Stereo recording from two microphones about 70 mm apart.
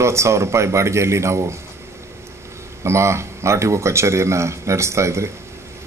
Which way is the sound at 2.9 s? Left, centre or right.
Right.